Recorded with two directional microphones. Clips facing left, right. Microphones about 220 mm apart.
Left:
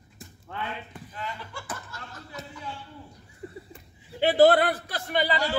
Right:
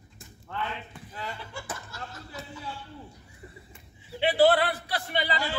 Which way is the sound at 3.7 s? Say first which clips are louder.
Right 1 dB; 40° left (ahead or behind).